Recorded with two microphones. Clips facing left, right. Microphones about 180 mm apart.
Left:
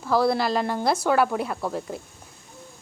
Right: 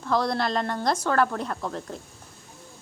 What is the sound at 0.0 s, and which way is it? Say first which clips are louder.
A woman's voice: left 3 dB; 5° left (ahead or behind).